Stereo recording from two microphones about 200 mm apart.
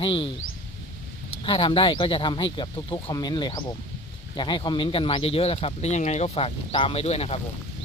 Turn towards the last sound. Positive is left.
turn(degrees=30)  # may be behind; listen again after turning